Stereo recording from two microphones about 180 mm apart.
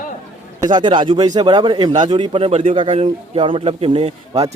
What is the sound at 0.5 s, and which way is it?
A man's voice, 25° right (ahead or behind).